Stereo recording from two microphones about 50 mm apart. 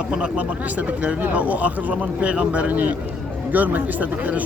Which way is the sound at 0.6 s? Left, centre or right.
Right.